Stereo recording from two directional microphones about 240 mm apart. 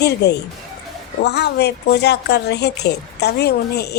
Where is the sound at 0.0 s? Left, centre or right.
Left.